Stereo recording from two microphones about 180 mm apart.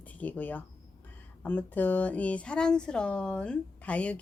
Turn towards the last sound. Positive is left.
turn(degrees=5)  # may be behind; listen again after turning